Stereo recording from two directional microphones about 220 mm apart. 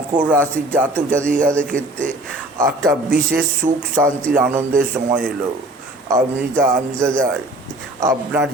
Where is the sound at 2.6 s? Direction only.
10° right (ahead or behind).